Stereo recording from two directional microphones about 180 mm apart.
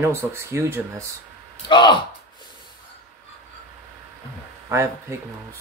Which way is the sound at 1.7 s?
25° left (ahead or behind).